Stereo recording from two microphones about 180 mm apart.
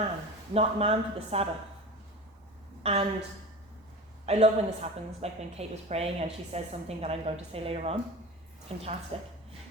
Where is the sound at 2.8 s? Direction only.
35° right (ahead or behind).